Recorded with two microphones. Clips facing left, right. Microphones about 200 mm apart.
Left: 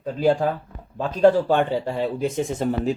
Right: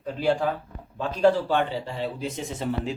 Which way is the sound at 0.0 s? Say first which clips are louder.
Left 4 dB; 40° left (ahead or behind).